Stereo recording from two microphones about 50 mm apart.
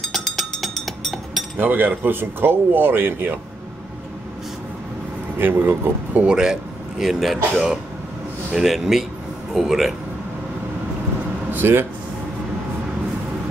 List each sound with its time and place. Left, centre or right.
0.1 s music: centre
1.6 s speech: right
5.4 s speech: right
6.2 s a man's voice: centre
11.5 s a sound: right